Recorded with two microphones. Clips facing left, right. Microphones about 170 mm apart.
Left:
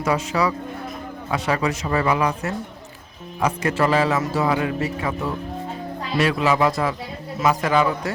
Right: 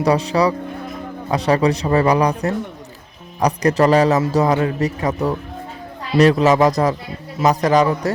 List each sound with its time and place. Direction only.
0.0 s a man's voice: 35° right (ahead or behind)